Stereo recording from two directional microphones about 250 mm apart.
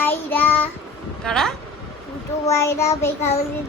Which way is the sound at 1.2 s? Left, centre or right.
Centre.